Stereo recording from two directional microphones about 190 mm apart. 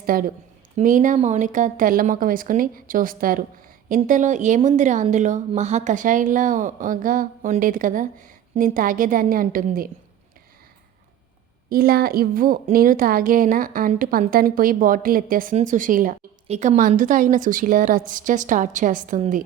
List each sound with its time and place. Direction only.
0.0 s a woman's voice: 50° right (ahead or behind)
11.7 s speech: 50° right (ahead or behind)